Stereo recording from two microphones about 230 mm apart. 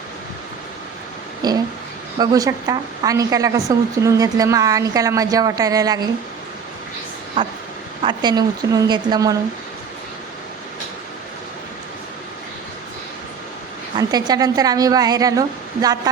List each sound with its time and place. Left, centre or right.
1.4 s a woman's voice: centre
8.0 s a woman's voice: centre
13.9 s a woman's voice: centre